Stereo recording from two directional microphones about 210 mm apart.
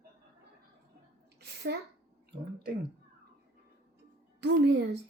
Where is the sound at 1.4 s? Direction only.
55° right (ahead or behind).